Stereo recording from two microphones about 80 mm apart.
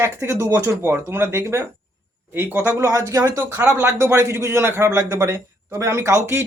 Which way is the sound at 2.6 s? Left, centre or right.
Right.